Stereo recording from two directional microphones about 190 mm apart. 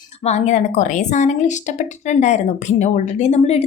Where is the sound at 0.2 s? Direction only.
35° left (ahead or behind).